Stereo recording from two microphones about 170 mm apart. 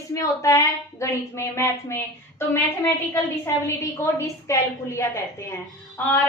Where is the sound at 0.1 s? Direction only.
20° left (ahead or behind).